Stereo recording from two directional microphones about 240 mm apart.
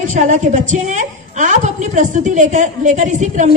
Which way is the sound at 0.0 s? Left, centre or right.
Right.